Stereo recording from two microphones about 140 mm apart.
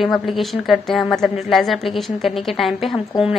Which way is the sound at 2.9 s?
40° left (ahead or behind).